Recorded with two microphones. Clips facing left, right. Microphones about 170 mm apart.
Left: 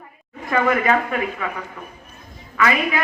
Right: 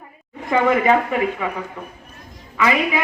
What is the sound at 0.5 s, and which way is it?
Speech, 20° right (ahead or behind).